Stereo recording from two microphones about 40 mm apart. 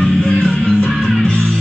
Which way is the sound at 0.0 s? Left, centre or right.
Centre.